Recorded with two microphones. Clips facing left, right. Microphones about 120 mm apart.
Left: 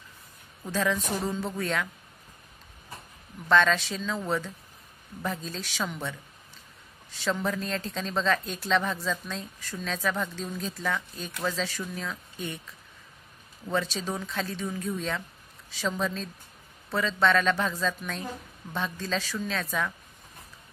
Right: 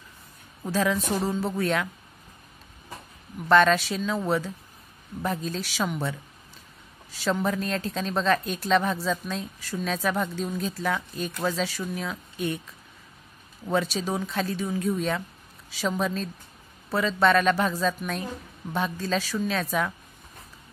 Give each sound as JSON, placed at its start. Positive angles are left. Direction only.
{"t": 0.7, "sound": "a woman's voice", "side_deg": -5}
{"t": 3.4, "sound": "a woman's voice", "side_deg": -5}
{"t": 5.2, "sound": "a woman's voice", "side_deg": -5}
{"t": 13.7, "sound": "a woman's voice", "side_deg": -10}